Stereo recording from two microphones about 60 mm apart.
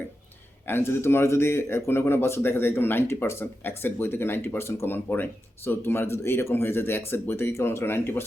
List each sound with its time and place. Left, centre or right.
0.7 s speech: left
5.0 s speech: left